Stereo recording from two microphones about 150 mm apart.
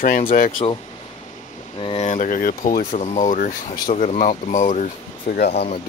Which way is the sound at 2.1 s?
60° left (ahead or behind).